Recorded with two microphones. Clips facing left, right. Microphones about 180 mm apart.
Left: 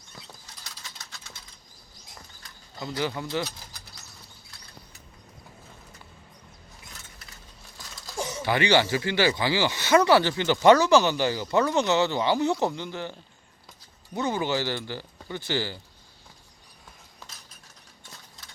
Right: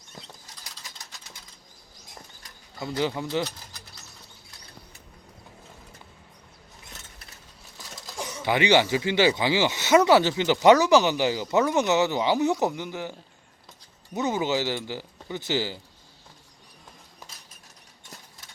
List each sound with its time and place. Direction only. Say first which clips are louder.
0.1 s bird flight: right 2 dB; 15° right (ahead or behind)
2.4 s a sound: right 2 dB; 20° right (ahead or behind)
8.4 s speech: right 2 dB; 20° right (ahead or behind)